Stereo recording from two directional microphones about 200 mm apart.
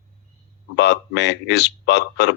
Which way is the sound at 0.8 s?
60° left (ahead or behind).